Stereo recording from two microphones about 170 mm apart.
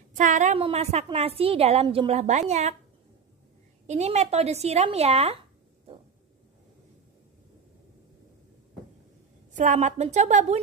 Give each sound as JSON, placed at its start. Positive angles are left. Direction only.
{"t": 0.2, "sound": "a woman's voice", "side_deg": -45}
{"t": 3.8, "sound": "a woman's voice", "side_deg": -40}
{"t": 9.5, "sound": "a woman's voice", "side_deg": -50}